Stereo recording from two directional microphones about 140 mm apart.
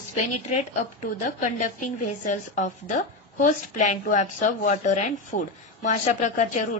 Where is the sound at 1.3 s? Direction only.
65° left (ahead or behind).